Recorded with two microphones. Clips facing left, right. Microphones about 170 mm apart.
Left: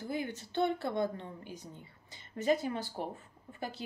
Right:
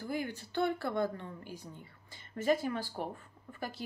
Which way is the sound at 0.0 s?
20° left (ahead or behind).